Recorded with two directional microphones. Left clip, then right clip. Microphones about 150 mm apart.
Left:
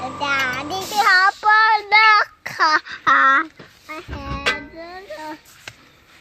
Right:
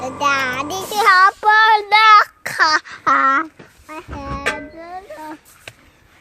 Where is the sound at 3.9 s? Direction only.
90° right.